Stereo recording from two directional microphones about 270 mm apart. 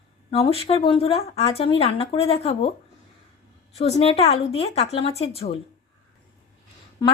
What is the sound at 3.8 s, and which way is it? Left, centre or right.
Speech, left.